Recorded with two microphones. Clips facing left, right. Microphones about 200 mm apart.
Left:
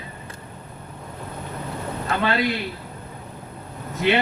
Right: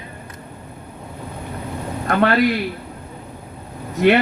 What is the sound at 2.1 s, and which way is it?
Speech, 60° right (ahead or behind).